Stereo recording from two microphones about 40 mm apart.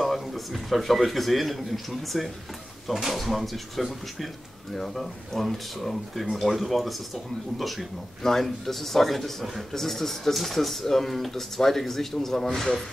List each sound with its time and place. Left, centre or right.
0.0 s a man's voice: centre